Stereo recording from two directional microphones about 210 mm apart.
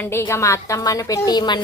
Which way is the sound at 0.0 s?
10° left (ahead or behind).